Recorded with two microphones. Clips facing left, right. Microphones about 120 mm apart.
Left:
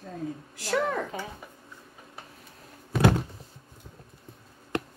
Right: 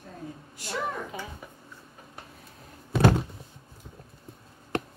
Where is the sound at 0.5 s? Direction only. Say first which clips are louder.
Left 5 dB; 90° left.